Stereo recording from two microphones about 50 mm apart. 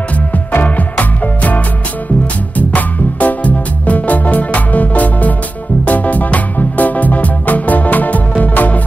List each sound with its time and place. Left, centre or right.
0.7 s music: left
2.7 s music: left